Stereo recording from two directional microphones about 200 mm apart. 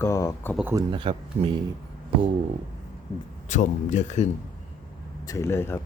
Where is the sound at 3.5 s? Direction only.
40° left (ahead or behind).